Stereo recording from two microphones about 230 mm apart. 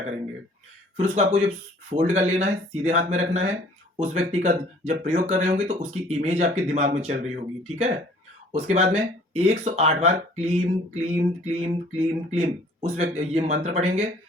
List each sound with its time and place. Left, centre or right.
0.9 s speech: right